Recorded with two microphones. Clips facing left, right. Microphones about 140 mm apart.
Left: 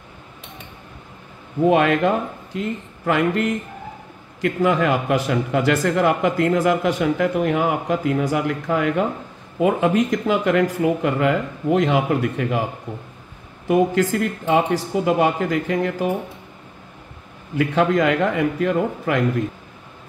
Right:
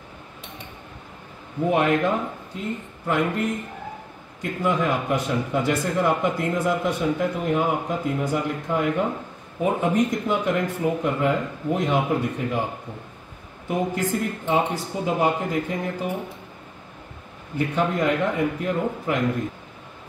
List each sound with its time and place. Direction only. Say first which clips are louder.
1.7 s speech: left 3 dB; 90° left
13.7 s speech: left 7 dB; 90° left
17.6 s speech: left 5 dB; 90° left